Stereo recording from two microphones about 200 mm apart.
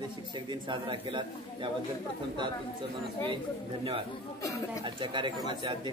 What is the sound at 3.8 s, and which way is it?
Speech, 30° right (ahead or behind).